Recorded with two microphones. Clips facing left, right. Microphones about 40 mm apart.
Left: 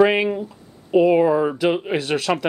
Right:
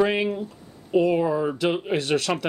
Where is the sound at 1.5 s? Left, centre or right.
Centre.